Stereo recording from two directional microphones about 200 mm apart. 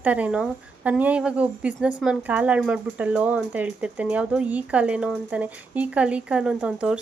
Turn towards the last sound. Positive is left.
turn(degrees=-5)  # may be behind; listen again after turning